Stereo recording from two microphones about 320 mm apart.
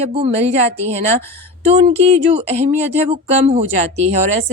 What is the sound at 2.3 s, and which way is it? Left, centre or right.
Speech, centre.